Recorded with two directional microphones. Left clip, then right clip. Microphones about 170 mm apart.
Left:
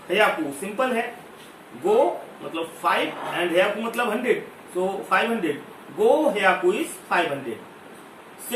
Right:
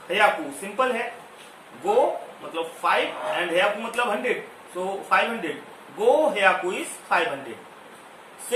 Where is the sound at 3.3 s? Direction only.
25° right (ahead or behind).